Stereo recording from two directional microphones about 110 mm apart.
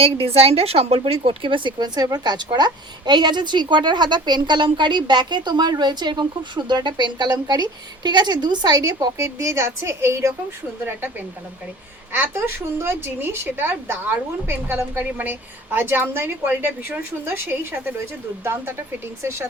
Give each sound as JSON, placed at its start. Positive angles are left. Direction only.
{"t": 0.0, "sound": "a woman's voice", "side_deg": -60}
{"t": 19.2, "sound": "a woman's voice", "side_deg": -25}